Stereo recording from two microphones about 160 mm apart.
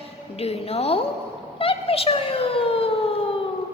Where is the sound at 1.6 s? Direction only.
35° left (ahead or behind).